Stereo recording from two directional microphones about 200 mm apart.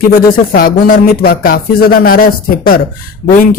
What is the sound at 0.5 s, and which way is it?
Speech, 45° left (ahead or behind).